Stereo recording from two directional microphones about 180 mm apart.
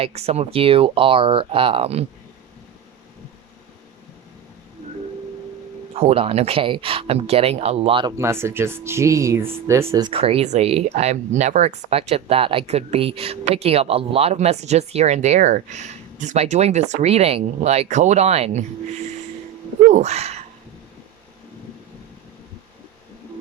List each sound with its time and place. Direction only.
0.0 s speech: 35° right (ahead or behind)
5.9 s speech: 35° right (ahead or behind)
8.1 s speech: 15° right (ahead or behind)
10.1 s speech: 30° right (ahead or behind)
19.9 s speech: 40° right (ahead or behind)